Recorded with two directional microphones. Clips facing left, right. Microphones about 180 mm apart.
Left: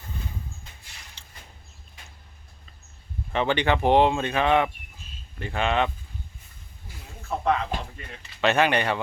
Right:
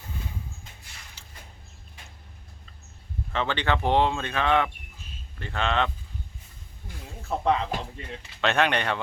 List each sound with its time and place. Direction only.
1.2 s vehicle: 5° right (ahead or behind)
3.3 s speech: 15° left (ahead or behind)
7.3 s speech: 30° right (ahead or behind)
8.4 s speech: 5° left (ahead or behind)